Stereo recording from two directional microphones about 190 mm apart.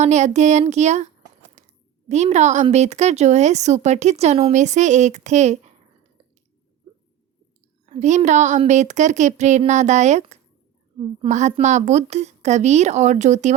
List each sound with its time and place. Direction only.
0.0 s speech: 40° right (ahead or behind)
1.6 s a sound: 40° right (ahead or behind)
2.0 s speech: 35° right (ahead or behind)
7.9 s speech: 40° right (ahead or behind)